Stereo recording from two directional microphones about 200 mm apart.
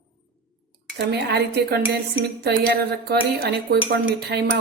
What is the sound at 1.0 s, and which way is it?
A woman's voice, 55° right (ahead or behind).